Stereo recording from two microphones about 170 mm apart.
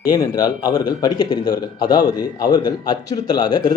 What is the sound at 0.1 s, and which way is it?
Speech, 25° left (ahead or behind).